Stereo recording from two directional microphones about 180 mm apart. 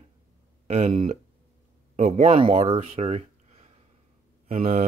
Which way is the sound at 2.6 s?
30° right (ahead or behind).